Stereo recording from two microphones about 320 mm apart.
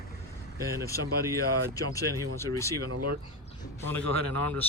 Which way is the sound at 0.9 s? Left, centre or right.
Centre.